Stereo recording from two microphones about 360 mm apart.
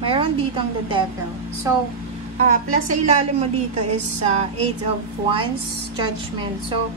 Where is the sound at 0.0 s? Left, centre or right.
Centre.